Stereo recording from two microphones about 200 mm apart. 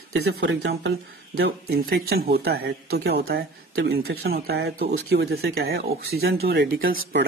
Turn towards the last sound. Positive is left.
turn(degrees=-45)  # may be behind; listen again after turning